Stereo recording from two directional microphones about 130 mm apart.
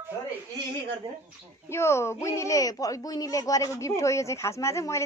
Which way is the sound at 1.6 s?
20° left (ahead or behind).